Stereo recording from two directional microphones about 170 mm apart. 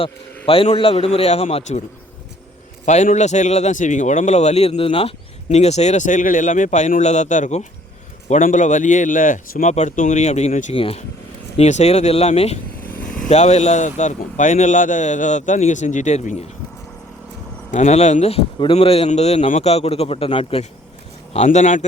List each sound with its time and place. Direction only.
0.4 s speech: 35° left (ahead or behind)
2.8 s a man's voice: 45° left (ahead or behind)
12.9 s vehicle: 5° left (ahead or behind)
13.2 s a man's voice: 40° left (ahead or behind)
17.7 s a man's voice: 45° left (ahead or behind)